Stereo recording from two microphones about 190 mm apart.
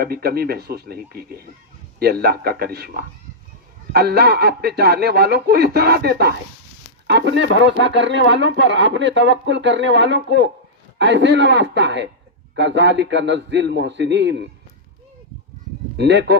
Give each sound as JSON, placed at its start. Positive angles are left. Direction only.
{"t": 0.0, "sound": "speech", "side_deg": -55}
{"t": 16.0, "sound": "speech", "side_deg": -65}